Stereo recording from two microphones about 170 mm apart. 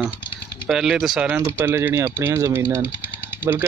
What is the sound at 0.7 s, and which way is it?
Speech, 5° right (ahead or behind).